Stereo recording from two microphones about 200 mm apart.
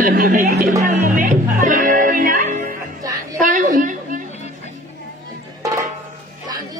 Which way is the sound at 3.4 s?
40° right (ahead or behind).